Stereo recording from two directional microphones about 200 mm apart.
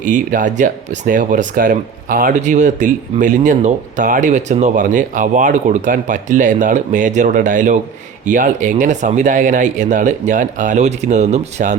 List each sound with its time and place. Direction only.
0.0 s speech: 40° right (ahead or behind)